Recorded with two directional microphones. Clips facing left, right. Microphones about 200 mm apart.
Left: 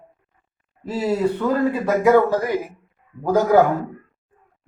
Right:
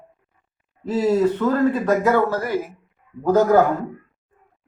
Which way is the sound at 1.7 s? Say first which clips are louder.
Left 2 dB; 15° left (ahead or behind).